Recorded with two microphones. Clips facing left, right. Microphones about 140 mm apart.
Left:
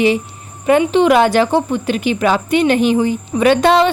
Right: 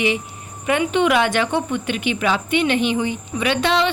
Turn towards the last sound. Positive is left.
turn(degrees=45)  # may be behind; listen again after turning